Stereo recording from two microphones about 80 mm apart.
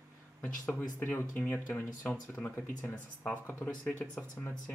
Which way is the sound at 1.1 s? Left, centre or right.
Left.